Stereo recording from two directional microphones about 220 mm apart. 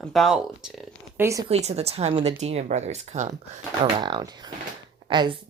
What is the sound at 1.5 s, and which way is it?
Speech, 30° right (ahead or behind).